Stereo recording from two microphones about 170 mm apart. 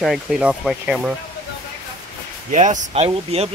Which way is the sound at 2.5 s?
45° right (ahead or behind).